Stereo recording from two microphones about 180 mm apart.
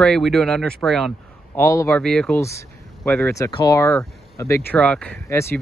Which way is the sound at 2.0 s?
5° left (ahead or behind).